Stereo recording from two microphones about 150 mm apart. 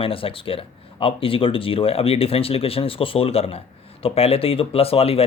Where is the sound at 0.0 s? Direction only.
35° left (ahead or behind).